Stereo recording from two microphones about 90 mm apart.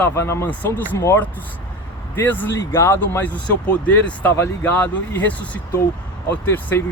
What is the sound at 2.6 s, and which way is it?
Speech, 30° left (ahead or behind).